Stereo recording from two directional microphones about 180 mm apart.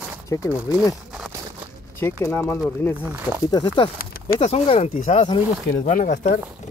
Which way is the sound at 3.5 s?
25° left (ahead or behind).